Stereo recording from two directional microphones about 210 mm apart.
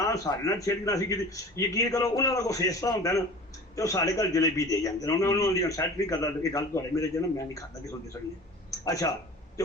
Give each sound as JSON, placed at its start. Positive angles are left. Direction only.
{"t": 0.0, "sound": "a man's voice", "side_deg": 15}